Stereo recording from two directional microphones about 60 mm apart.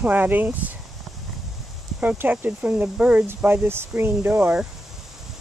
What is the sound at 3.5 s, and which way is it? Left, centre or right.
Speech, right.